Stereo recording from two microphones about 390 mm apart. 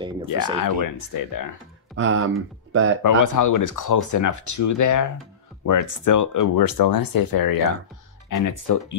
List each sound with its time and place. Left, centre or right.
0.3 s speech: left
2.0 s speech: right
3.0 s speech: left